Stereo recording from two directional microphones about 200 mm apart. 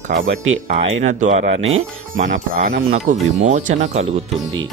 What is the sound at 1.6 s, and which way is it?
Speech, 90° right.